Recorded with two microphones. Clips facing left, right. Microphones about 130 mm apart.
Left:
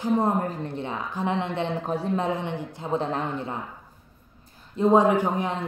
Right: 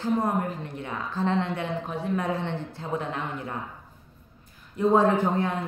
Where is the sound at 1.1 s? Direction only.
15° left (ahead or behind).